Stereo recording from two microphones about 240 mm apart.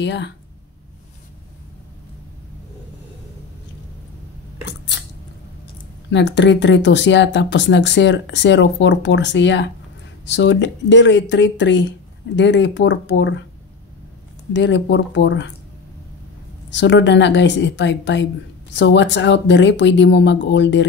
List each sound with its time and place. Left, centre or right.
0.0 s speech: left
4.6 s scissors: left
6.0 s speech: left
14.5 s speech: left
16.7 s speech: left